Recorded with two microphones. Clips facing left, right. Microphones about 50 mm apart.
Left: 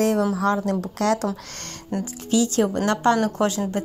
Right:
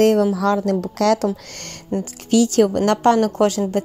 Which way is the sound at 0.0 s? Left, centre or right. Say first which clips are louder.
Right 6 dB; right.